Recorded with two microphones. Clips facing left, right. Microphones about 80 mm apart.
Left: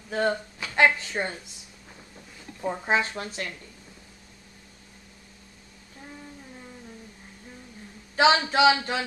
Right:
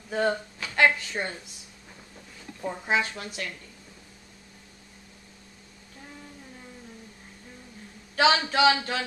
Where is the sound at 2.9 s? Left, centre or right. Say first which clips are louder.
Left 1 dB; left.